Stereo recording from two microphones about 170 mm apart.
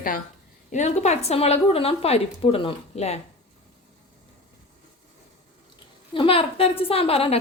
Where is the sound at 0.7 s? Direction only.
45° left (ahead or behind).